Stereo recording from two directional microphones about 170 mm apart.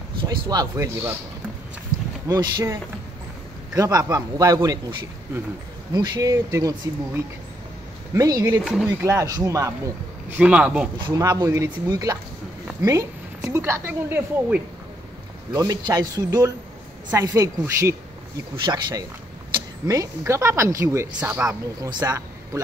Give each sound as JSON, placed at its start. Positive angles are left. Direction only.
{"t": 0.2, "sound": "a man's voice", "side_deg": -25}
{"t": 1.9, "sound": "a sound", "side_deg": -50}
{"t": 2.2, "sound": "a man's voice", "side_deg": -20}
{"t": 5.9, "sound": "a man's voice", "side_deg": -20}
{"t": 8.1, "sound": "a man's voice", "side_deg": -20}
{"t": 8.6, "sound": "speech", "side_deg": -5}
{"t": 9.0, "sound": "a man's voice", "side_deg": -20}
{"t": 10.3, "sound": "a woman's voice", "side_deg": -5}
{"t": 11.1, "sound": "a man's voice", "side_deg": -25}
{"t": 21.2, "sound": "speech", "side_deg": -5}
{"t": 21.5, "sound": "a man's voice", "side_deg": -20}